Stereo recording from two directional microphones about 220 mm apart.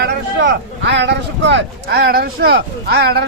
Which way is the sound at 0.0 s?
50° right (ahead or behind).